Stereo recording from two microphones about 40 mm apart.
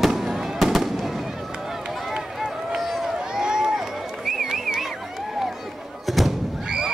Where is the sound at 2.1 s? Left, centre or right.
Centre.